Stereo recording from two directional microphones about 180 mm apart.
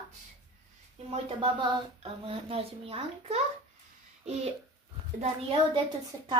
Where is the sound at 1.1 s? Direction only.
30° right (ahead or behind).